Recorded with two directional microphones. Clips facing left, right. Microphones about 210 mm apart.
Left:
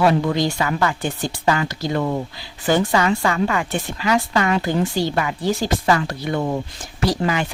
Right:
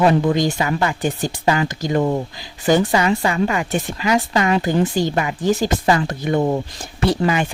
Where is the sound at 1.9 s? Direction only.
30° right (ahead or behind).